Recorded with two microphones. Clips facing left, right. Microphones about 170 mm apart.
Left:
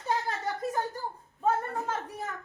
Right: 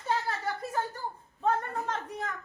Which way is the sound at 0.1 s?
15° left (ahead or behind).